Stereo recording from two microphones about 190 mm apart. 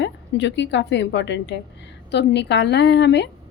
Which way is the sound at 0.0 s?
70° left (ahead or behind).